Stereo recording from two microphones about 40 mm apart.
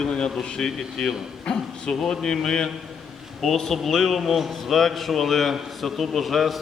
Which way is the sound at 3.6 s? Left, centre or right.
Centre.